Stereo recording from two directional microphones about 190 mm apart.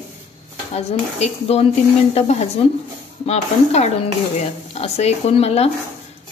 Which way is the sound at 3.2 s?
35° left (ahead or behind).